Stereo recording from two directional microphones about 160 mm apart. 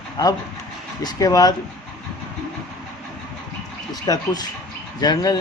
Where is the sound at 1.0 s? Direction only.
25° left (ahead or behind).